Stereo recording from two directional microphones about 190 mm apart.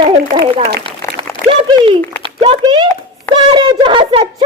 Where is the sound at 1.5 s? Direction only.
25° right (ahead or behind).